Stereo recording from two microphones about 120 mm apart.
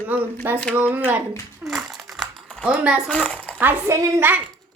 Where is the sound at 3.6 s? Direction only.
15° right (ahead or behind).